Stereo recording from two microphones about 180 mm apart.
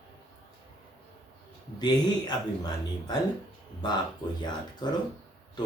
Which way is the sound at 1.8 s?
25° left (ahead or behind).